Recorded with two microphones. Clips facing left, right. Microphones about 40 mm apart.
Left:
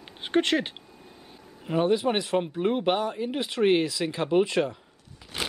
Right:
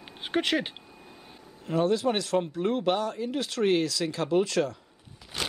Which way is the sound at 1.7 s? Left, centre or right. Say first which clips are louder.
Left 1 dB; left.